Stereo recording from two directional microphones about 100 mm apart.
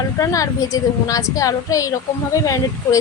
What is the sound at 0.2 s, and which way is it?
A woman's voice, 35° left (ahead or behind).